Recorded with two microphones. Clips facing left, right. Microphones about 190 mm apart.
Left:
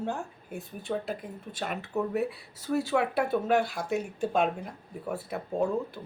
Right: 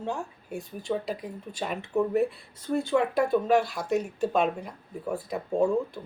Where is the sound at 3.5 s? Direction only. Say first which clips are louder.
Right 2 dB; 55° left (ahead or behind).